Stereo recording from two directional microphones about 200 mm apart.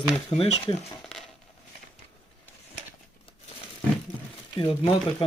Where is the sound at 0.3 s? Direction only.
30° left (ahead or behind).